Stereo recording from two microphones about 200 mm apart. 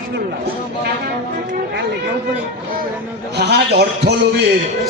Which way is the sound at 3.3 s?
55° right (ahead or behind).